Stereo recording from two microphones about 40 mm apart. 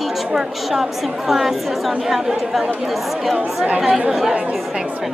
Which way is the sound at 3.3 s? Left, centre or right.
Right.